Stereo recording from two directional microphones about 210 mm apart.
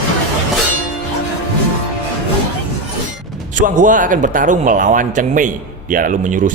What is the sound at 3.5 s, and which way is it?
A man's voice, 40° right (ahead or behind).